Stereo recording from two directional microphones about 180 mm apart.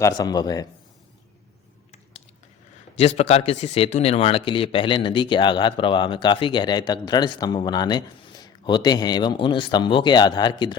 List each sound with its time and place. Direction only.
0.0 s speech: 20° left (ahead or behind)
3.0 s speech: 35° left (ahead or behind)